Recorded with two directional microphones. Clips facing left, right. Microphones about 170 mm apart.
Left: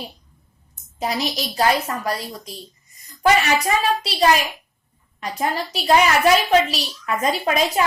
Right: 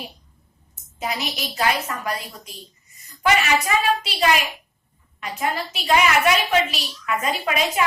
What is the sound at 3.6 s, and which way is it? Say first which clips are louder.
A woman's voice: left 1 dB; 35° left (ahead or behind).